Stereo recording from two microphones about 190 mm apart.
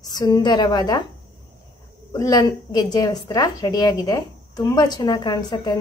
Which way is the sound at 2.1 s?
20° left (ahead or behind).